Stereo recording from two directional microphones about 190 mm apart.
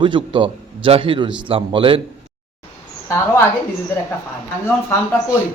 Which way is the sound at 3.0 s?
15° left (ahead or behind).